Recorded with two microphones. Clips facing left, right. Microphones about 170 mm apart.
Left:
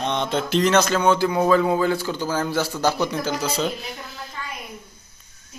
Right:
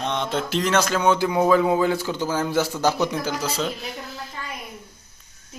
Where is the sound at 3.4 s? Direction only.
5° right (ahead or behind).